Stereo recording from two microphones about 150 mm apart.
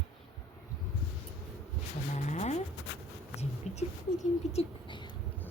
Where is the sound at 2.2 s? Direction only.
50° left (ahead or behind).